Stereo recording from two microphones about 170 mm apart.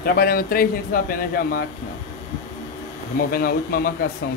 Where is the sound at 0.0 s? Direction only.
60° left (ahead or behind).